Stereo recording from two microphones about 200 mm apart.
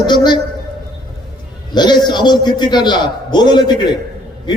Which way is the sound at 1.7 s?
20° left (ahead or behind).